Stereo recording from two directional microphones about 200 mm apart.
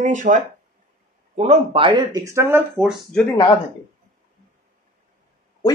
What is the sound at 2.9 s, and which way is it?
Speech, 5° left (ahead or behind).